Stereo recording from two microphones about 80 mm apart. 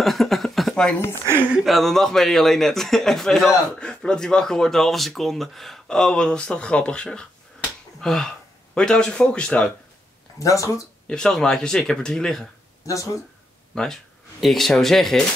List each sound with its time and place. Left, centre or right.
0.0 s speech: centre
10.4 s speech: left
11.1 s speech: centre
12.8 s speech: left
13.7 s speech: centre